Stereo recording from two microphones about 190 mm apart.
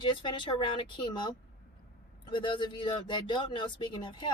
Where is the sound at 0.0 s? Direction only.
25° left (ahead or behind).